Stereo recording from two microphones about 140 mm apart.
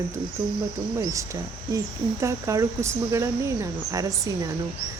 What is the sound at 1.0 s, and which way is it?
Speech, 25° right (ahead or behind).